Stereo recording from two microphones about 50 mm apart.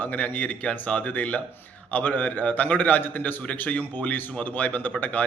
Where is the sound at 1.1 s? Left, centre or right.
Left.